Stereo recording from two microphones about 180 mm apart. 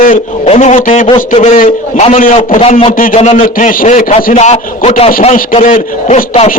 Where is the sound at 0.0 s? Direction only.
45° left (ahead or behind).